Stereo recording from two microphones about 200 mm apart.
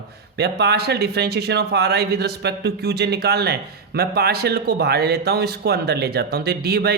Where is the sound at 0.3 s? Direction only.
55° right (ahead or behind).